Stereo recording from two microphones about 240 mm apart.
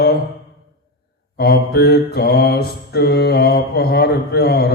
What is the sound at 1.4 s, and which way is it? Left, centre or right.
Mantra, left.